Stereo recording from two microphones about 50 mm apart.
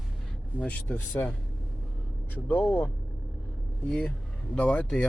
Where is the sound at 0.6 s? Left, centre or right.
Left.